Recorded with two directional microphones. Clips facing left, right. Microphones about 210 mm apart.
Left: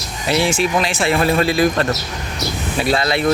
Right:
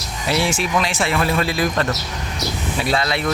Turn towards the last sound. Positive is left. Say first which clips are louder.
# left 5 dB
turn(degrees=30)  # may be behind; listen again after turning